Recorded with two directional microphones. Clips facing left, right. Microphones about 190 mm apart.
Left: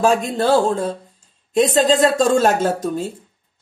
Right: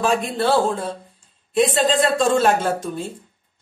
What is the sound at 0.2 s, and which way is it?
Speech, 40° left (ahead or behind).